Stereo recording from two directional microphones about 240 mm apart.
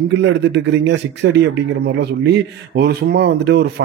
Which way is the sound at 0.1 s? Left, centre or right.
Right.